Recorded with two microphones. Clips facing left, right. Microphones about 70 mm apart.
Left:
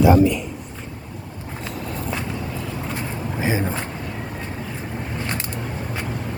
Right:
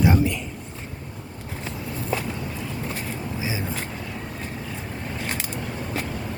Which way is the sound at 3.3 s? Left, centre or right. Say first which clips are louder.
Left 8 dB; left.